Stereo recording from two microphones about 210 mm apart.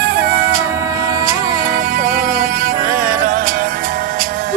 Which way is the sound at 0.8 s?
15° right (ahead or behind).